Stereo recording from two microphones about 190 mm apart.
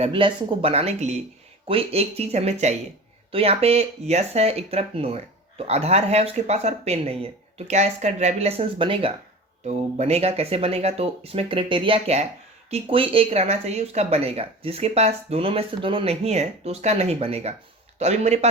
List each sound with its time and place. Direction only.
0.0 s speech: 25° right (ahead or behind)